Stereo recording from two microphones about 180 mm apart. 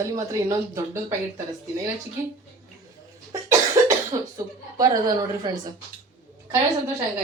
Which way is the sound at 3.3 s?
15° right (ahead or behind).